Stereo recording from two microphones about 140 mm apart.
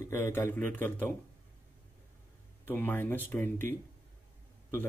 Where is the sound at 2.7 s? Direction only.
15° left (ahead or behind).